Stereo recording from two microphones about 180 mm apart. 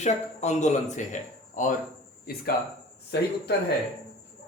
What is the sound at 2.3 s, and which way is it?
A man's voice, 60° left (ahead or behind).